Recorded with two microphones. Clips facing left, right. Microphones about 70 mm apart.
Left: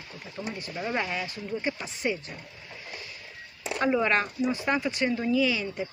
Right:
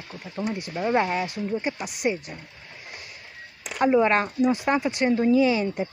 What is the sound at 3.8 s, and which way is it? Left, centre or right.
Speech, right.